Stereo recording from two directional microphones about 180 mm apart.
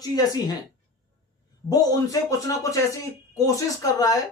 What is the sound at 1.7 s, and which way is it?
Speech, 20° left (ahead or behind).